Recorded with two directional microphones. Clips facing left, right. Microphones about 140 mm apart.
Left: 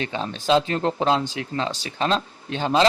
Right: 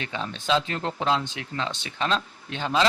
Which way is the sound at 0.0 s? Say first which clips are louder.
Left 5 dB; 35° left (ahead or behind).